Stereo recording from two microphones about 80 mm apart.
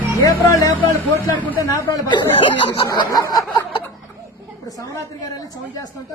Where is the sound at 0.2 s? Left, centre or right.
Left.